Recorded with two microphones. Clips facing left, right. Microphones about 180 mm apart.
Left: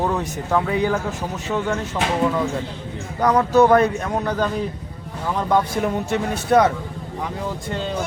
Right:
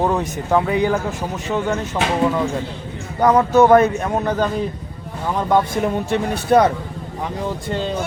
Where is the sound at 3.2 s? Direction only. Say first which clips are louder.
Right 2 dB; 25° right (ahead or behind).